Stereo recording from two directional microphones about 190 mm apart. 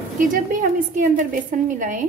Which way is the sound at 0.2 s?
45° right (ahead or behind).